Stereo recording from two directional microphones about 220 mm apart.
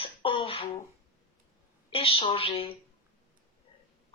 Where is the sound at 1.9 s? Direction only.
25° left (ahead or behind).